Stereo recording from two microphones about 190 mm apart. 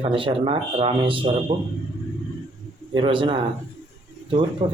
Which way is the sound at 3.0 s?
25° right (ahead or behind).